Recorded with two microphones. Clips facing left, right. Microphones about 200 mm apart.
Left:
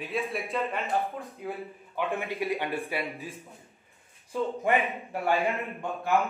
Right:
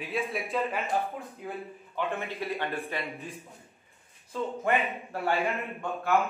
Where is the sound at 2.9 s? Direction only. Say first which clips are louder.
Left 2 dB; centre (ahead or behind).